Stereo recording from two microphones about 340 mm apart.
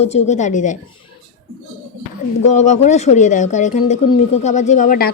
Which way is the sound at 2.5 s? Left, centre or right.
Left.